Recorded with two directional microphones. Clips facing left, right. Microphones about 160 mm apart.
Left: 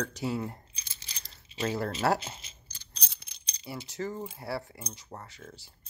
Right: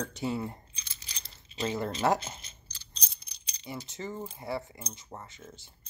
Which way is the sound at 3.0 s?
65° left (ahead or behind).